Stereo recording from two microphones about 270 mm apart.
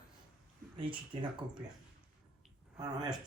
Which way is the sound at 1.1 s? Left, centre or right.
Centre.